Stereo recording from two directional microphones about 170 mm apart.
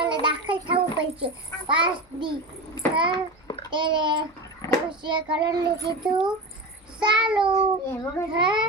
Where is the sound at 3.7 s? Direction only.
25° right (ahead or behind).